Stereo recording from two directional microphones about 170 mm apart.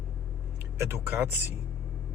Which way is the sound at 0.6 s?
10° right (ahead or behind).